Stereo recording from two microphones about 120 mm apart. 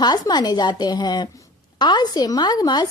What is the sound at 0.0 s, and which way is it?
A woman's voice, 35° left (ahead or behind).